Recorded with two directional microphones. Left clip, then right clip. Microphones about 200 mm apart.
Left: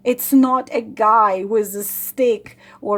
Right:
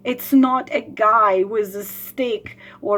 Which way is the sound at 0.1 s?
30° left (ahead or behind).